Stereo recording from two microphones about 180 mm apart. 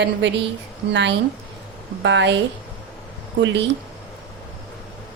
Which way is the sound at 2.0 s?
80° right.